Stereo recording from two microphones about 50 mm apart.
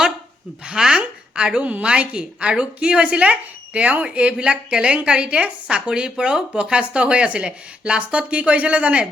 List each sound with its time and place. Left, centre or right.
0.6 s speech: centre